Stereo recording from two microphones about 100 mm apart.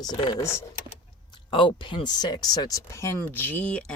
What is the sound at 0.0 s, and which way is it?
Speech, 45° left (ahead or behind).